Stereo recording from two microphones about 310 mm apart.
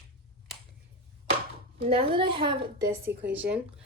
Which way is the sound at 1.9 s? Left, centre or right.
Centre.